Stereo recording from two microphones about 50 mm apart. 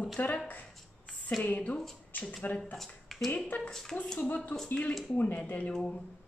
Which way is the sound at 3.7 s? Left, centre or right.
Centre.